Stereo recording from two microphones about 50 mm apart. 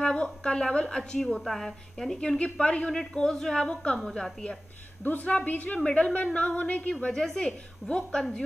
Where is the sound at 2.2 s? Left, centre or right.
Centre.